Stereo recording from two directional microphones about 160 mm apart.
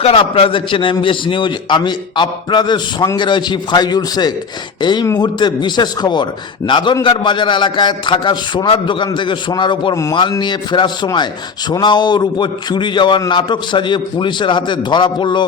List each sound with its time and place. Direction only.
0.0 s a man's voice: 35° left (ahead or behind)